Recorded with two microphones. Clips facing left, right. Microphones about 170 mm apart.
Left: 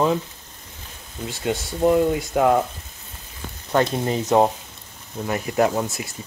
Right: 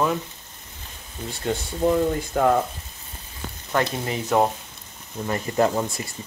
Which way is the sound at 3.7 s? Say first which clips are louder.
Left 4 dB; 25° left (ahead or behind).